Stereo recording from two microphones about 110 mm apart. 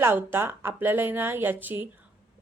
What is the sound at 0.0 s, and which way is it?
A woman's voice, 20° right (ahead or behind).